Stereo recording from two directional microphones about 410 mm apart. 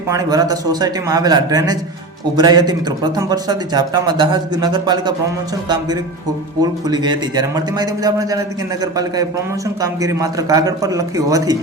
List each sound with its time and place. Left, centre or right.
0.1 s speech: centre
6.6 s speech: centre